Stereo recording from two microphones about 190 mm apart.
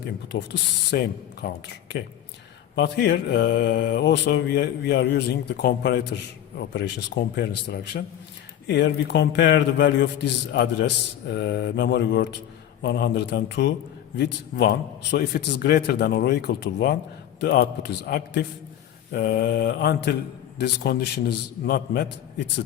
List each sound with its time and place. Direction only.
0.3 s mantra: 65° left (ahead or behind)
14.5 s a man's voice: 50° left (ahead or behind)
15.1 s mantra: 60° left (ahead or behind)